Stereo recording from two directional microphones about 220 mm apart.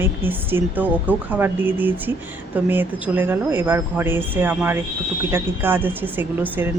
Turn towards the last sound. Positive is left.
turn(degrees=-10)  # may be behind; listen again after turning